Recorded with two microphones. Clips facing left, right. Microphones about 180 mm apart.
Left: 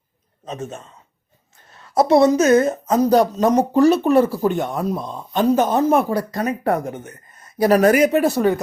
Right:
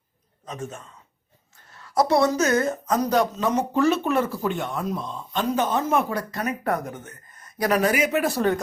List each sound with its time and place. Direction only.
0.4 s a man's voice: 25° left (ahead or behind)
7.7 s a woman's voice: 45° left (ahead or behind)
8.4 s speech: 10° left (ahead or behind)